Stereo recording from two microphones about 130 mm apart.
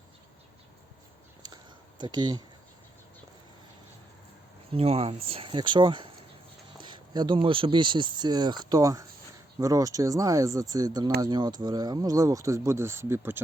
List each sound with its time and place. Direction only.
2.0 s speech: 35° right (ahead or behind)
4.7 s speech: 50° right (ahead or behind); by 13.4 s 15° right (ahead or behind)